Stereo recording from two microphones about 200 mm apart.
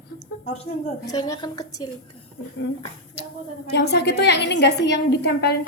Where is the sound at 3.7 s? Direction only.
60° left (ahead or behind).